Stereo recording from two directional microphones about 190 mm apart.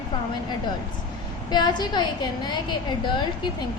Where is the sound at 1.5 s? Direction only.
20° left (ahead or behind).